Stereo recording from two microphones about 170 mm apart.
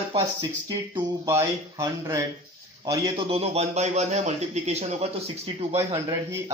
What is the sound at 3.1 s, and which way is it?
A man's voice, 35° right (ahead or behind).